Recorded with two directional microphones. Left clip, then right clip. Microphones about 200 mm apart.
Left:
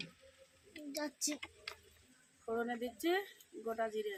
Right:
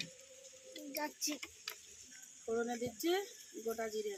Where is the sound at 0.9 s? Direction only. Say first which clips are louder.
Even; 60° left (ahead or behind).